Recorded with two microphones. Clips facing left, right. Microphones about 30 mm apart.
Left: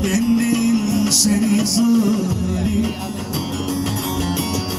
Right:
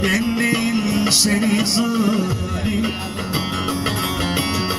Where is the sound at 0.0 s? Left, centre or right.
Right.